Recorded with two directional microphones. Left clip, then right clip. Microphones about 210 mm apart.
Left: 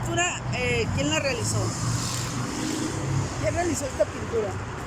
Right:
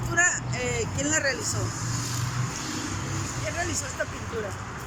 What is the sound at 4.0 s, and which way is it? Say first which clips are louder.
Speech: left 8 dB; 20° left (ahead or behind).